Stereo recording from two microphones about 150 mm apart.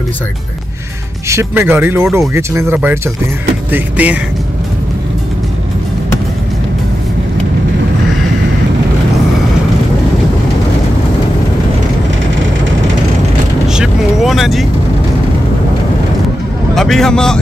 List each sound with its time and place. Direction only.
1.3 s speech: 15° right (ahead or behind)
13.7 s vehicle: centre (ahead or behind)
16.7 s speech: 5° left (ahead or behind)